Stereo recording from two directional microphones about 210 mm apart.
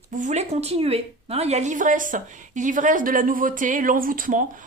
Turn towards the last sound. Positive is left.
turn(degrees=-40)  # may be behind; listen again after turning